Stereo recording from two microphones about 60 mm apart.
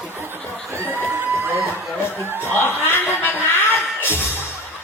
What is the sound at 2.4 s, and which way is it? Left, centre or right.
Chuckle, left.